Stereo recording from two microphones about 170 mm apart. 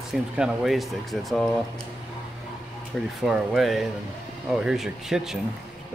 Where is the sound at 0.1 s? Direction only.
Centre (ahead or behind).